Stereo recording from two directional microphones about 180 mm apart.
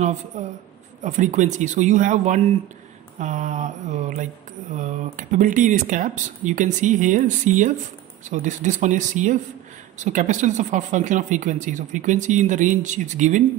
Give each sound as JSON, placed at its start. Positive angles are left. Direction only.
{"t": 0.3, "sound": "speech", "side_deg": -40}